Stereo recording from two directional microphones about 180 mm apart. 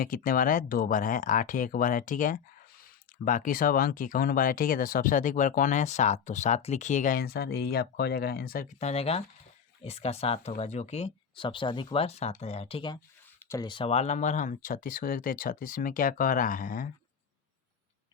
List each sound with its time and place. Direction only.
0.0 s speech: 50° left (ahead or behind)
8.8 s speech: 35° left (ahead or behind)
13.4 s a sound: 15° left (ahead or behind)
13.7 s speech: 30° left (ahead or behind); by 16.9 s 50° left (ahead or behind)